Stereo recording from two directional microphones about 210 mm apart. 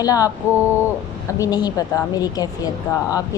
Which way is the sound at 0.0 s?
15° left (ahead or behind).